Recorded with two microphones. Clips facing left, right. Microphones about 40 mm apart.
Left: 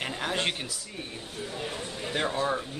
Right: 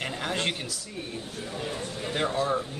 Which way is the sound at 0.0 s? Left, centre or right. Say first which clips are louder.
Even; centre.